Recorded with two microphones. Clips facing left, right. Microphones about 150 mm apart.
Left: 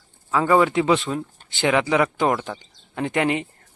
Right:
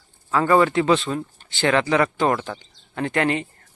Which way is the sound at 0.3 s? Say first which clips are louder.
Even; 5° left (ahead or behind).